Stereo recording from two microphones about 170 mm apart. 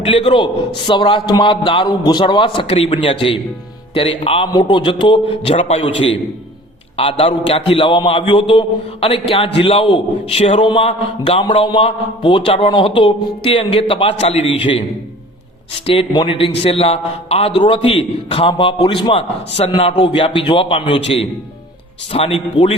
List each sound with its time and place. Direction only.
0.0 s a man's voice: 30° left (ahead or behind)
15.9 s a man's voice: 35° left (ahead or behind)